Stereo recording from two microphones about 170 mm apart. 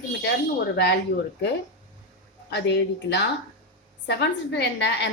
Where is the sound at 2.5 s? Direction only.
85° left.